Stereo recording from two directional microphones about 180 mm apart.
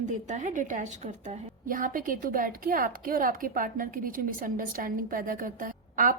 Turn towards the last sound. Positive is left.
turn(degrees=-50)  # may be behind; listen again after turning